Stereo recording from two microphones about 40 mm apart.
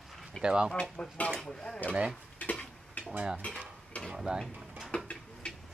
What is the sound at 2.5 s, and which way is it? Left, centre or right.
Stir, left.